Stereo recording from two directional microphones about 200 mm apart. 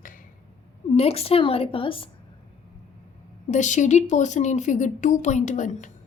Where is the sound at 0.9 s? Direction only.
30° left (ahead or behind).